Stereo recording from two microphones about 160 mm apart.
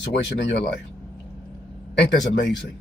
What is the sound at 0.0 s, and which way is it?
Speech, 90° left.